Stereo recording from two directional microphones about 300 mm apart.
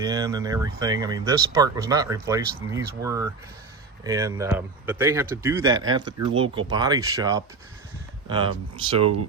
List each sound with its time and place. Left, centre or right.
0.0 s speech: centre
9.0 s speech: right